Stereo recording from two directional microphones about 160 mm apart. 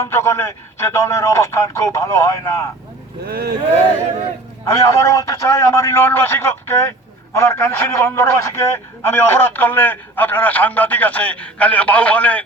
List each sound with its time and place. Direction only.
0.0 s a man's voice: 15° left (ahead or behind)
3.2 s speech: 70° right (ahead or behind)
4.6 s a man's voice: 20° left (ahead or behind)